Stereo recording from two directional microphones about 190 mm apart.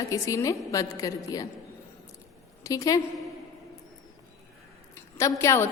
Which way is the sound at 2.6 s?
20° left (ahead or behind).